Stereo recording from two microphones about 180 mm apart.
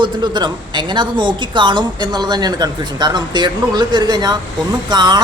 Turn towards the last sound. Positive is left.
turn(degrees=-25)  # may be behind; listen again after turning